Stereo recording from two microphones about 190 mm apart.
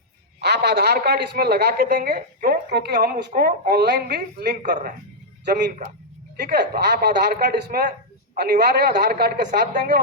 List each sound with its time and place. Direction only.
0.4 s a woman's voice: 60° right (ahead or behind)
6.5 s a woman's voice: 60° right (ahead or behind)